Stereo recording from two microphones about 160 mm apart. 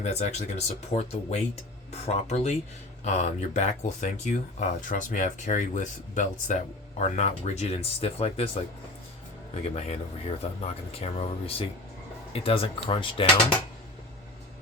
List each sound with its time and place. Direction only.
0.0 s speech: 45° left (ahead or behind)